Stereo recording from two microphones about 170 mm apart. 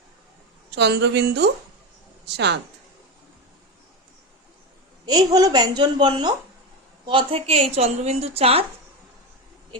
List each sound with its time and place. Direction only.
0.8 s speech: 85° right
5.0 s a woman's voice: 20° right (ahead or behind)